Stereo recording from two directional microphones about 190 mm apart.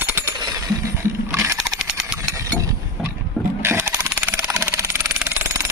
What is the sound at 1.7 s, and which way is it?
Vehicle, centre (ahead or behind).